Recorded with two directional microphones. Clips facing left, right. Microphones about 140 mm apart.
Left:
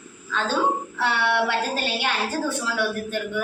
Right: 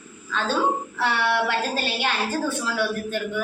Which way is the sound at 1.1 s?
15° left (ahead or behind).